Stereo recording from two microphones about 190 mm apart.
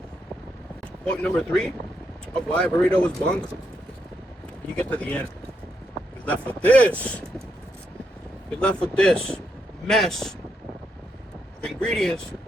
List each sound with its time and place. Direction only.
1.0 s speech: 5° left (ahead or behind)
4.8 s speech: 5° left (ahead or behind)
6.2 s speech: 10° left (ahead or behind)
8.5 s speech: 5° left (ahead or behind)
11.6 s speech: 5° left (ahead or behind)